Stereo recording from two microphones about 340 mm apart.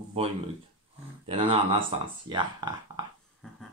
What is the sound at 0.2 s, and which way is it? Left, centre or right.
Speech, centre.